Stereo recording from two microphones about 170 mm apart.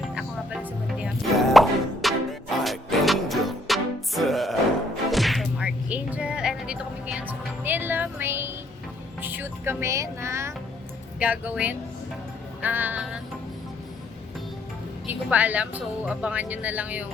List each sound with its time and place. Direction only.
0.1 s music: 5° right (ahead or behind)
11.2 s a woman's voice: 10° right (ahead or behind)
15.0 s a woman's voice: 10° right (ahead or behind)